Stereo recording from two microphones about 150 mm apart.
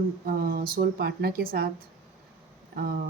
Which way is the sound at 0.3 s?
80° right.